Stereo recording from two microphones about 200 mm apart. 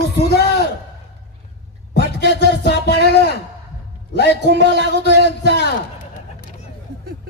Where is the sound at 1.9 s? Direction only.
55° left (ahead or behind).